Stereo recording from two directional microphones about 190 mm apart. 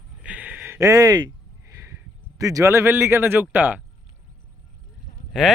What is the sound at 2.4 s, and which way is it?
Speech, 15° right (ahead or behind).